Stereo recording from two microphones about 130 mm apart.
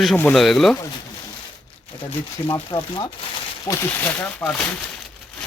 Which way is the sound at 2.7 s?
40° left (ahead or behind).